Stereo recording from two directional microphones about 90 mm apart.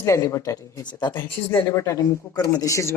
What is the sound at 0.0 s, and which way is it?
Speech, 35° left (ahead or behind).